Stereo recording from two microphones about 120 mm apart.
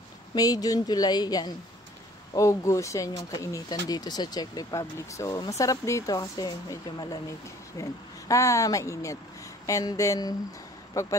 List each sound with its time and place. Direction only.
0.3 s speech: 30° left (ahead or behind)